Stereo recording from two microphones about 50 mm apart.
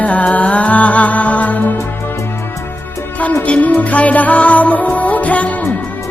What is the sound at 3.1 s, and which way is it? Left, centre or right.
Music, left.